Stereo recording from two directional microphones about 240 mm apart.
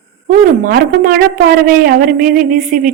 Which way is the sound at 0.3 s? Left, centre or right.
Right.